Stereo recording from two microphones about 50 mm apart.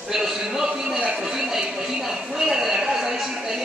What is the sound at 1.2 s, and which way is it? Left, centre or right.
Speech, centre.